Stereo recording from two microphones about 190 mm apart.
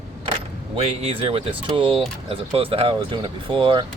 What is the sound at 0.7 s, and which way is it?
Speech, 30° right (ahead or behind).